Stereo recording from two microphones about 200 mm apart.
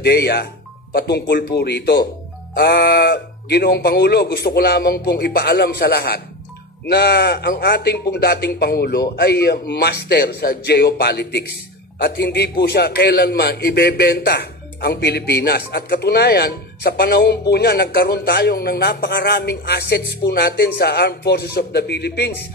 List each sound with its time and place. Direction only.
0.0 s a man's voice: 55° left (ahead or behind)